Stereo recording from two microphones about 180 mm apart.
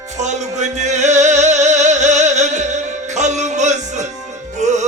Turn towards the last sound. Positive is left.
turn(degrees=-40)  # may be behind; listen again after turning